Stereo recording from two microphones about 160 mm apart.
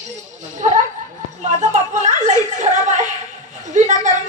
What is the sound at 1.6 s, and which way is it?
Chuckle, 45° right (ahead or behind).